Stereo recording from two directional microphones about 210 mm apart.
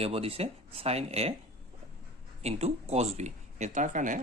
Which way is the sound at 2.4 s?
30° right (ahead or behind).